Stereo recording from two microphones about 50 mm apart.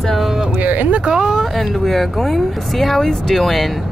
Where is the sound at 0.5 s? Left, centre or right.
Right.